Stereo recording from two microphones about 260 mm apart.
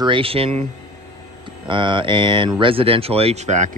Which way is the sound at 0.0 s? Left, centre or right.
Centre.